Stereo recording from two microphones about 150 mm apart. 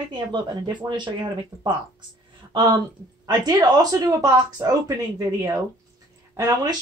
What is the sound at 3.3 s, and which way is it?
A woman's voice, 25° right (ahead or behind).